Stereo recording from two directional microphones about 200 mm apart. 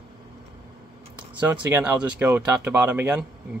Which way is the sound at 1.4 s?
10° right (ahead or behind).